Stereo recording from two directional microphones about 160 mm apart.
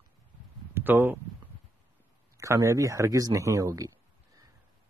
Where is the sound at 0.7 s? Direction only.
10° right (ahead or behind).